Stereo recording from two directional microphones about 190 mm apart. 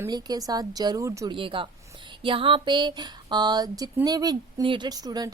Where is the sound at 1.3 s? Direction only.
25° right (ahead or behind).